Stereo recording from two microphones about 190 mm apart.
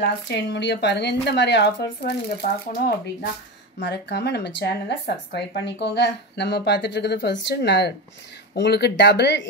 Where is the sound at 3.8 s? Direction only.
60° left (ahead or behind).